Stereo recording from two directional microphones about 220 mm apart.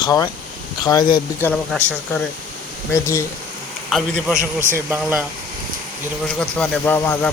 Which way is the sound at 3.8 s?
Centre (ahead or behind).